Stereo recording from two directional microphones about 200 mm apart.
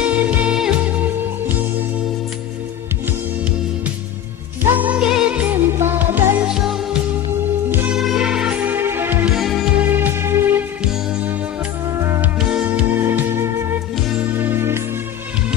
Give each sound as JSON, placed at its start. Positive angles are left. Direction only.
{"t": 0.0, "sound": "music", "side_deg": -5}
{"t": 4.7, "sound": "music", "side_deg": -5}
{"t": 12.4, "sound": "music", "side_deg": -5}